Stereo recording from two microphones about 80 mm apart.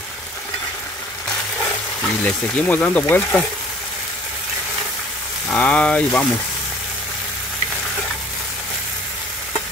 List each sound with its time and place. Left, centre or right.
2.2 s speech: centre
5.5 s speech: centre